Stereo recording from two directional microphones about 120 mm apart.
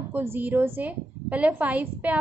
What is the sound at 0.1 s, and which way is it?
A woman's voice, 15° right (ahead or behind).